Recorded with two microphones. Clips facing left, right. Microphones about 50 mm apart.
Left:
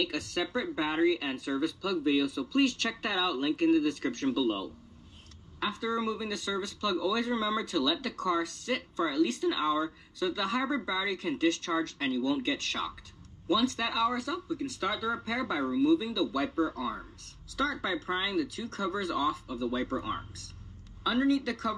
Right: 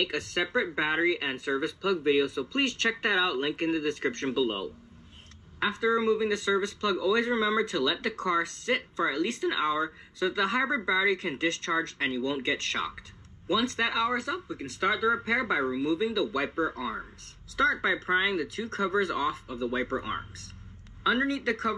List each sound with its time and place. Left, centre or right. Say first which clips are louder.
0.0 s speech: right 2 dB; right
3.9 s speech: right 1 dB; right